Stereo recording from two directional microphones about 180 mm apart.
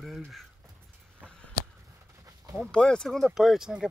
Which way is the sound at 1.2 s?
5° left (ahead or behind).